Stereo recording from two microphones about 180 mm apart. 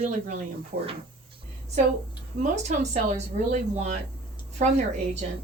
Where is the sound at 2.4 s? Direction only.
40° right (ahead or behind).